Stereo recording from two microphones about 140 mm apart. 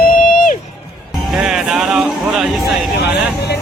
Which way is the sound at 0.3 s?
80° left.